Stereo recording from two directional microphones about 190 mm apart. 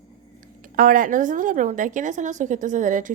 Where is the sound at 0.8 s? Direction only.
45° right (ahead or behind).